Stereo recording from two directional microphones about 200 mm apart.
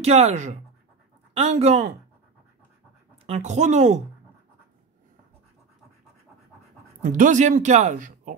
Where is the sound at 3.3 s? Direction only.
35° right (ahead or behind).